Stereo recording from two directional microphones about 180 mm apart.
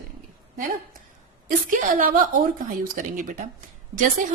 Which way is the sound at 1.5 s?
50° right (ahead or behind).